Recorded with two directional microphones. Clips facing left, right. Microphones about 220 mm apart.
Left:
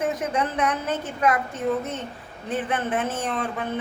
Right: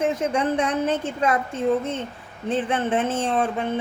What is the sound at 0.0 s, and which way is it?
Speech, 30° right (ahead or behind).